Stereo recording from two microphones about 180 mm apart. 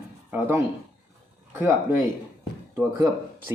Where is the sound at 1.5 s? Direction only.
10° right (ahead or behind).